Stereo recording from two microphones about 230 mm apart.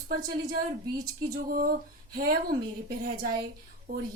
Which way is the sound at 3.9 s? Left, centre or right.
Right.